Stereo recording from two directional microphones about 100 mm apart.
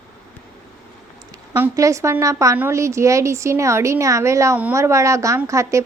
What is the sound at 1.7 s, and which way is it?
A woman's voice, 30° right (ahead or behind).